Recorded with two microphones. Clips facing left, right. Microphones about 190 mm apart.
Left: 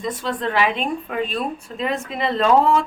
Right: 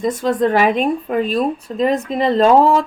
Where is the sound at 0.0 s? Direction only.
45° right (ahead or behind).